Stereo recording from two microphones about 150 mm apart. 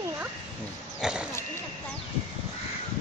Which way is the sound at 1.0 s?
5° right (ahead or behind).